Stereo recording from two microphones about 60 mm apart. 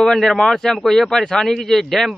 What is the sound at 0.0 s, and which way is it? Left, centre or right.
Speech, centre.